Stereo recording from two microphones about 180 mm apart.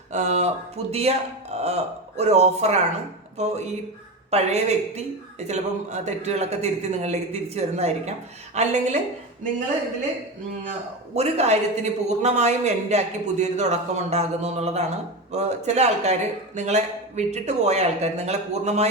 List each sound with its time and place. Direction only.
0.1 s a man's voice: 40° right (ahead or behind)
11.1 s a man's voice: 40° right (ahead or behind)